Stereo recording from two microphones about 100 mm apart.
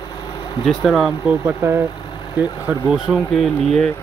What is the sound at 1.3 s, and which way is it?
Speech, 20° right (ahead or behind).